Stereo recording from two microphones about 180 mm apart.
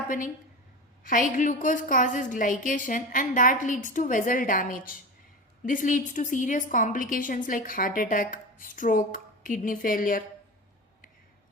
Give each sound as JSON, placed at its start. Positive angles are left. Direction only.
{"t": 1.4, "sound": "a woman's voice", "side_deg": 45}